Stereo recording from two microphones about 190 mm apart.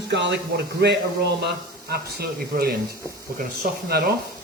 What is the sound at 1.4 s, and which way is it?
A man's voice, 55° right (ahead or behind).